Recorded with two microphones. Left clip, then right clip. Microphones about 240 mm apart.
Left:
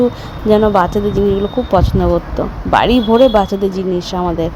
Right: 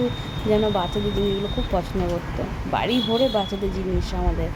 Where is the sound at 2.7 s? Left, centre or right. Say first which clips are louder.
Left 11 dB; left.